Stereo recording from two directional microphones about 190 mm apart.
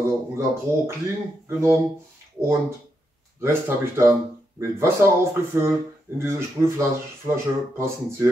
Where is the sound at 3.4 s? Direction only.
15° right (ahead or behind).